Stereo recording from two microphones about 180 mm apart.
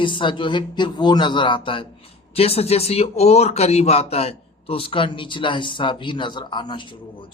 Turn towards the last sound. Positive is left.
turn(degrees=25)  # may be behind; listen again after turning